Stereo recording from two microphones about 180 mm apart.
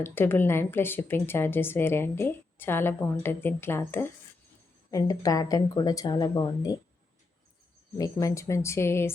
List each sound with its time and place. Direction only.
0.0 s speech: 10° left (ahead or behind)
7.9 s speech: 20° left (ahead or behind)